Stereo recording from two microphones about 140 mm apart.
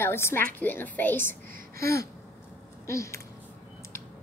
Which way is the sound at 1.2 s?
80° right.